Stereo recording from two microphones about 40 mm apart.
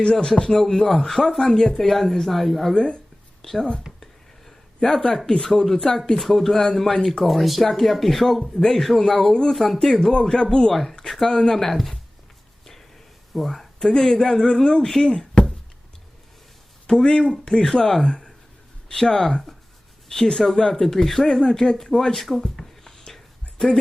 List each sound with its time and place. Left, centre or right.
0.0 s a man's voice: left
1.9 s speech: centre
2.7 s speech: left
3.4 s speech: centre
4.0 s a sound: centre
6.2 s a man's voice: centre
13.3 s a man's voice: centre
15.1 s a sound: centre
17.0 s a man's voice: centre
18.0 s a man's voice: left; by 23.8 s centre